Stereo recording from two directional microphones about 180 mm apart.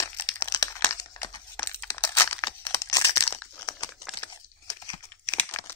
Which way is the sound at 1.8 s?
10° left (ahead or behind).